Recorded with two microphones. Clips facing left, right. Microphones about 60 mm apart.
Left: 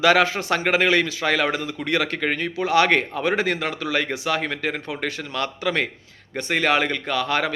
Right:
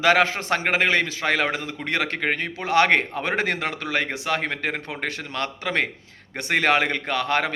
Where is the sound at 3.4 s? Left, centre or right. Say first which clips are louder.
Left 1 dB; right.